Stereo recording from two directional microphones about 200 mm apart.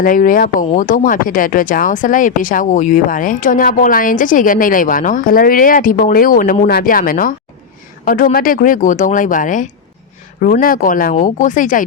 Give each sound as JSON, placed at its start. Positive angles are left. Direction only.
{"t": 0.0, "sound": "speech", "side_deg": 45}